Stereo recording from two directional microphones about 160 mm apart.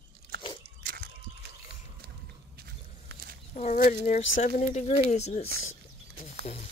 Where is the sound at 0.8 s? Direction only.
65° right (ahead or behind).